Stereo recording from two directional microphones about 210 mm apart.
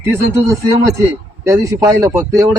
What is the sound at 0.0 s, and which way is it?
A man's voice, 15° right (ahead or behind).